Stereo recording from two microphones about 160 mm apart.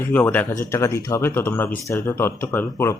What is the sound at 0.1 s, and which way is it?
Speech, 10° left (ahead or behind).